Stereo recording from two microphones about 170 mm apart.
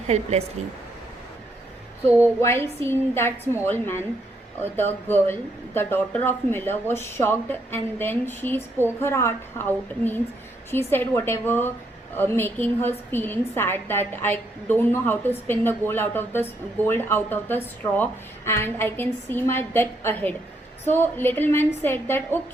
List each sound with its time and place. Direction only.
0.1 s speech: 40° right (ahead or behind)
2.0 s a woman's voice: 15° left (ahead or behind)